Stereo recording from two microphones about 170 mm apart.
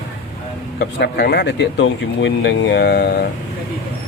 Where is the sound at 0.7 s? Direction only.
80° left.